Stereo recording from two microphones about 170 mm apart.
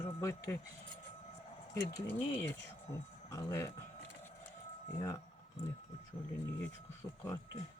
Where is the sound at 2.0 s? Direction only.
15° left (ahead or behind).